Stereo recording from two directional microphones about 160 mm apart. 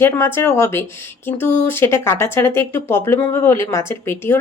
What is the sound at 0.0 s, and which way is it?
Speech, 15° left (ahead or behind).